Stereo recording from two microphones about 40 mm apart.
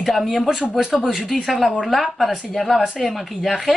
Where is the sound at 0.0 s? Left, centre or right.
Centre.